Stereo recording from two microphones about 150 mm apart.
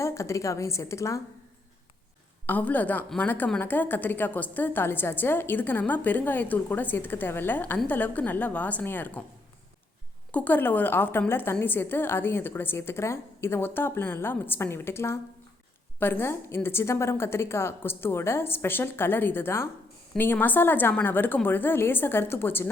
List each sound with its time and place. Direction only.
0.0 s a woman's voice: 20° left (ahead or behind)
2.5 s a woman's voice: 10° left (ahead or behind)
10.3 s a woman's voice: 10° left (ahead or behind)